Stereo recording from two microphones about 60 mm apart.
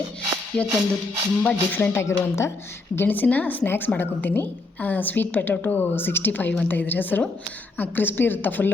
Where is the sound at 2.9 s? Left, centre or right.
Left.